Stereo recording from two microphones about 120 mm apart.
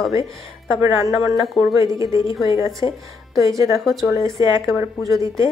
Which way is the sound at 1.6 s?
25° right (ahead or behind).